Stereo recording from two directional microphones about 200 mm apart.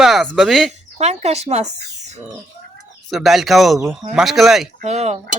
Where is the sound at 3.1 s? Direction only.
Centre (ahead or behind).